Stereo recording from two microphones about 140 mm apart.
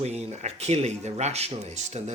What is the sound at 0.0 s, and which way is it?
Speech, 50° right (ahead or behind).